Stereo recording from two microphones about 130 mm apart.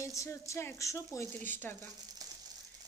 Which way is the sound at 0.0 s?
25° left (ahead or behind).